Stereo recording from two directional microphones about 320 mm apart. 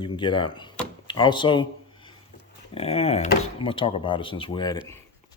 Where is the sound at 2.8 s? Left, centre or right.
Centre.